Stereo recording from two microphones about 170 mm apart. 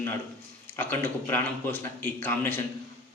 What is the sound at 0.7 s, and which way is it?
A man's voice, 15° left (ahead or behind).